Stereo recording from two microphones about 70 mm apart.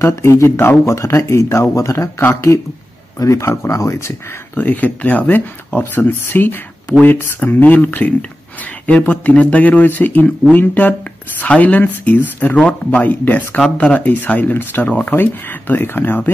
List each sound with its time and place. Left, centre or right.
0.0 s speech: left
4.6 s speech: left